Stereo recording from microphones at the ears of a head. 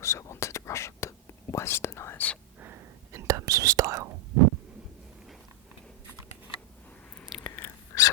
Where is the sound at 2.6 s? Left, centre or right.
Right.